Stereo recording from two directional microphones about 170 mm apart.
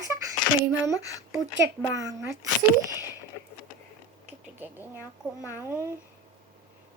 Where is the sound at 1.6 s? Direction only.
20° right (ahead or behind).